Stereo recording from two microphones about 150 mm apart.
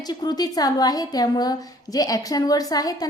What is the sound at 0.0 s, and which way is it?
Speech, 25° left (ahead or behind).